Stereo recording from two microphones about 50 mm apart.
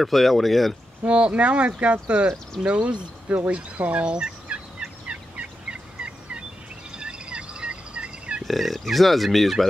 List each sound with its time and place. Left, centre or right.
0.0 s speech: centre
1.0 s speech: right
3.3 s fowl: right
6.9 s a sound: right
8.5 s speech: centre